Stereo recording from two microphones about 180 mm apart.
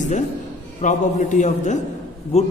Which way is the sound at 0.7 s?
45° left (ahead or behind).